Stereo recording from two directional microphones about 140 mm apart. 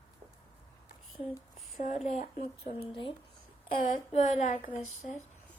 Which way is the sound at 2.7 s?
35° left (ahead or behind).